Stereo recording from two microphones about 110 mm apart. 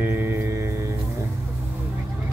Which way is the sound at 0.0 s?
20° right (ahead or behind).